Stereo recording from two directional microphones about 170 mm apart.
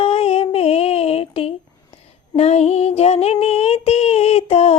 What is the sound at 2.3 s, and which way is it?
Child singing, 40° left (ahead or behind).